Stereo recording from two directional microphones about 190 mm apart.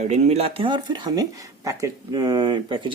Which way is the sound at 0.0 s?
35° right (ahead or behind).